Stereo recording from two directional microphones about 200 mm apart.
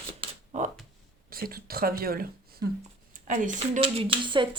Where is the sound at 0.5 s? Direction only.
40° right (ahead or behind).